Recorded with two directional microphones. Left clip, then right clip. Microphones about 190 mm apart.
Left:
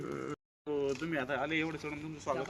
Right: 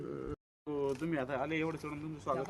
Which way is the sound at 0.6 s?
70° right (ahead or behind).